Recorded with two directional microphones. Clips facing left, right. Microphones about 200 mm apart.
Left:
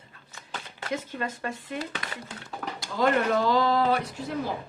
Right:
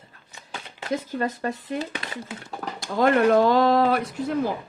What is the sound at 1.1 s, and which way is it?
Speech, 40° right (ahead or behind).